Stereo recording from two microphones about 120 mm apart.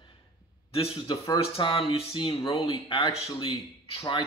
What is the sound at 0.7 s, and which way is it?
Speech, 50° left (ahead or behind).